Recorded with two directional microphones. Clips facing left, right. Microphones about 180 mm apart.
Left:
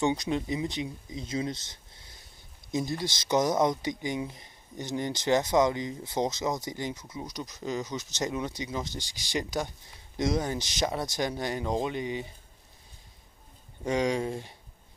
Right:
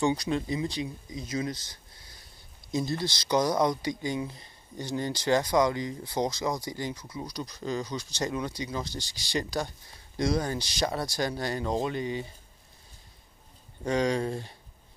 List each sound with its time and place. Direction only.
0.0 s speech: 20° left (ahead or behind)
13.8 s speech: 15° left (ahead or behind)